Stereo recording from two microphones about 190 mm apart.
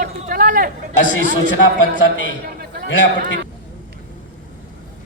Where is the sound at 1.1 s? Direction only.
85° left.